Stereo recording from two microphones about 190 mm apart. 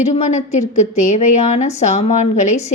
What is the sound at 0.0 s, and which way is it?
A woman's voice, 35° left (ahead or behind).